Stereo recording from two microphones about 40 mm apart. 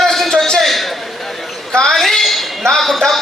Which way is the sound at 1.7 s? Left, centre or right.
Centre.